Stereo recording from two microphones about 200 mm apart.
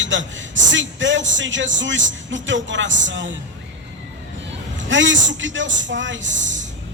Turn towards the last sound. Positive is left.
turn(degrees=-70)  # may be behind; listen again after turning